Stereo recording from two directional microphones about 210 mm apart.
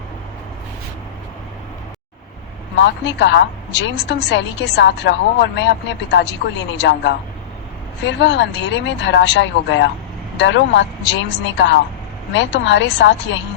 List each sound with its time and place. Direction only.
2.7 s a woman's voice: 55° left (ahead or behind)